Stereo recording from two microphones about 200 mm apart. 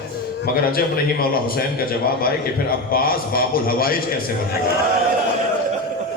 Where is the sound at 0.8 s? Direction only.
50° left (ahead or behind).